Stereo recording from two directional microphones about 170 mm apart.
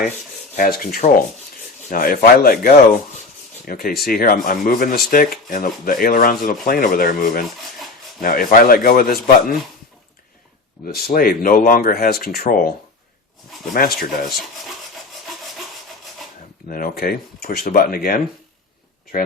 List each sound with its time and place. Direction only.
0.5 s speech: 55° left (ahead or behind)
10.9 s speech: 60° left (ahead or behind)
13.7 s speech: 60° left (ahead or behind)
14.0 s filing: centre (ahead or behind)
15.3 s sawing: centre (ahead or behind)
16.6 s speech: 55° left (ahead or behind)